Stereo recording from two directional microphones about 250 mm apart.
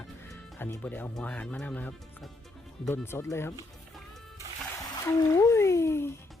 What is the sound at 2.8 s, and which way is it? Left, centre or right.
Music, centre.